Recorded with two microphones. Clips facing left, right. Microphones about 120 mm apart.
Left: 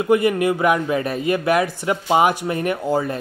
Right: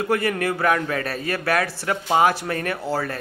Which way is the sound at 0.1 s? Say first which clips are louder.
Left 7 dB; 15° left (ahead or behind).